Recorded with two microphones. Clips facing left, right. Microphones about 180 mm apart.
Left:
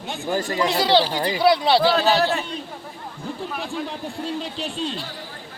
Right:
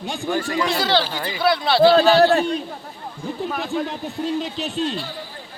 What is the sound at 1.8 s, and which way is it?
Speech, 40° right (ahead or behind).